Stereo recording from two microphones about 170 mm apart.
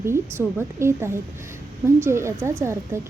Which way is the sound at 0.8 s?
15° right (ahead or behind).